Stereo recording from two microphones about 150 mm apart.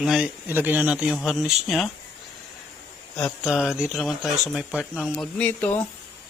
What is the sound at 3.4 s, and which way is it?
Speech, 5° right (ahead or behind).